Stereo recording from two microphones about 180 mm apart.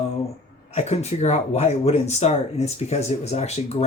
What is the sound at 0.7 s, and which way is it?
Speech, 35° left (ahead or behind).